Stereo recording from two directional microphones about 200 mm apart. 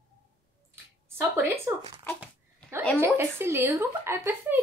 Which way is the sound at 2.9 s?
10° right (ahead or behind).